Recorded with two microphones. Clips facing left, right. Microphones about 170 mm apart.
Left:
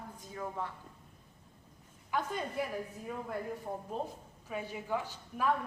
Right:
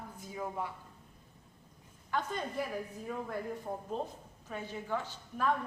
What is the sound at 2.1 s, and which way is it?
Speech, 5° left (ahead or behind).